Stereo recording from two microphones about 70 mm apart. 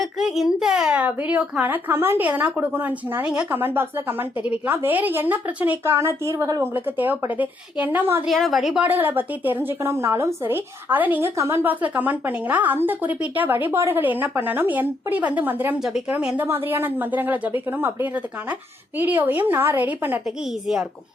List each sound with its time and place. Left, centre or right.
0.0 s a child's voice: centre
0.9 s a woman's voice: right
5.8 s a woman's voice: right
6.7 s a woman's voice: right
8.3 s a woman's voice: centre
8.8 s a woman's voice: right
11.2 s a woman's voice: right
11.6 s a woman's voice: right
15.8 s a child's voice: centre
16.4 s a woman's voice: right